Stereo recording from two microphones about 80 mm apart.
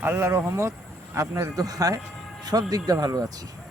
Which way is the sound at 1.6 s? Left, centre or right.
Right.